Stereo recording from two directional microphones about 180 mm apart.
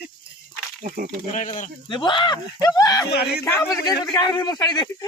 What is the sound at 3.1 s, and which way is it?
Speech, 65° left (ahead or behind).